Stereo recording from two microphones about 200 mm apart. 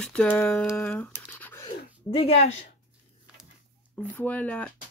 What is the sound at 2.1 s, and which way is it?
Speech, 30° left (ahead or behind).